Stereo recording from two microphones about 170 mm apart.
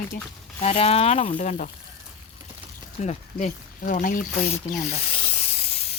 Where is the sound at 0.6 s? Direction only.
35° left (ahead or behind).